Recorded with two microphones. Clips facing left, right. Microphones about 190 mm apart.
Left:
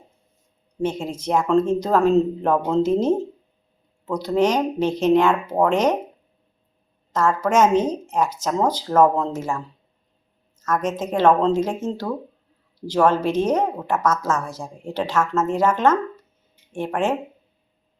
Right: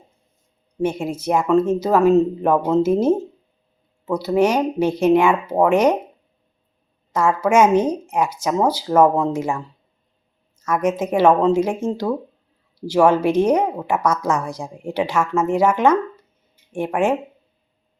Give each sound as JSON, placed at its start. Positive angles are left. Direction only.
{"t": 0.8, "sound": "a woman's voice", "side_deg": -10}
{"t": 7.1, "sound": "a woman's voice", "side_deg": -10}
{"t": 10.6, "sound": "a woman's voice", "side_deg": -10}